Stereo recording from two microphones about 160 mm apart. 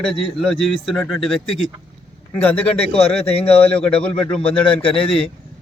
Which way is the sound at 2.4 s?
10° left (ahead or behind).